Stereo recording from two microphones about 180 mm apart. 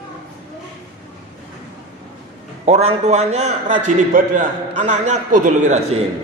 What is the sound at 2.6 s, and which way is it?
A man's voice, 35° right (ahead or behind).